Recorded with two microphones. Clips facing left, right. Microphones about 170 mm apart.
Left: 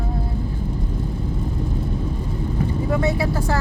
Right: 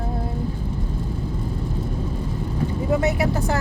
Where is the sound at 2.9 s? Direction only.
20° right (ahead or behind).